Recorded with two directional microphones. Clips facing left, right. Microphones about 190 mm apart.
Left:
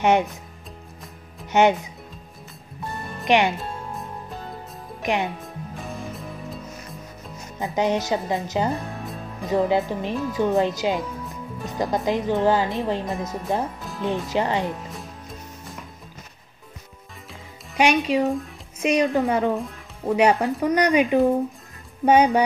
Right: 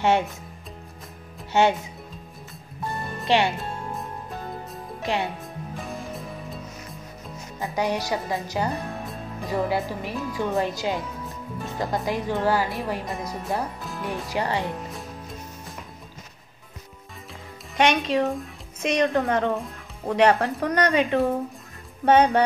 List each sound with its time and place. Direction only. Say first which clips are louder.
0.0 s speech: left 2 dB; 20° left (ahead or behind)
1.5 s speech: left 3 dB; 20° left (ahead or behind)
3.3 s speech: left 2 dB; 15° left (ahead or behind)
5.0 s speech: left 2 dB; 20° left (ahead or behind)
6.1 s music: left 1 dB; centre (ahead or behind)
7.5 s speech: left 3 dB; 20° left (ahead or behind)
14.9 s music: right 1 dB; centre (ahead or behind)
17.7 s speech: left 2 dB; 10° left (ahead or behind)